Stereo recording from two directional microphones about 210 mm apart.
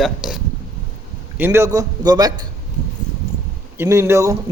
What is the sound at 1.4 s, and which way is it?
Speech, 10° right (ahead or behind).